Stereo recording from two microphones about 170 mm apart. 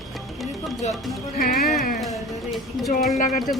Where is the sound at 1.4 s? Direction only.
55° left (ahead or behind).